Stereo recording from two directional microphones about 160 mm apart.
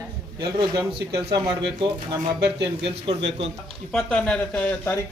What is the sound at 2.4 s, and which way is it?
Speech, 90° right.